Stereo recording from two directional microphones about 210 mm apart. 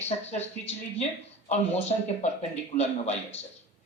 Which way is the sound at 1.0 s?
30° left (ahead or behind).